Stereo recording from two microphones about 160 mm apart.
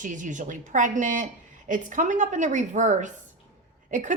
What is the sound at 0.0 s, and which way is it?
A woman's voice, 50° right (ahead or behind).